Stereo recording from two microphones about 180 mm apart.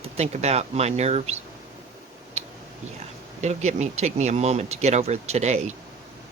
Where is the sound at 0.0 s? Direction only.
35° right (ahead or behind).